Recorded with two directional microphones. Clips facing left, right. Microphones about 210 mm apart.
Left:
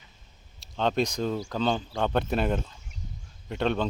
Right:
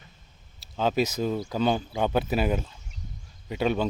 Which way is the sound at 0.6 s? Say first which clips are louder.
Right 1 dB; 5° right (ahead or behind).